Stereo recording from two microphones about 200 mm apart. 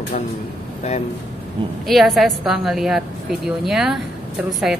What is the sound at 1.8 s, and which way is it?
A woman's voice, centre (ahead or behind).